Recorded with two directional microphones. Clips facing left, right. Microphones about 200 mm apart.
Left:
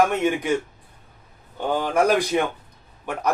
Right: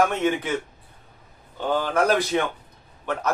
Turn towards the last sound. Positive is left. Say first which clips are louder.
# right 1 dB
turn(degrees=10)  # may be behind; listen again after turning